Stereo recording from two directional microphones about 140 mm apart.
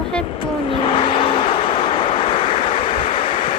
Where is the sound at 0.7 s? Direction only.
40° left (ahead or behind).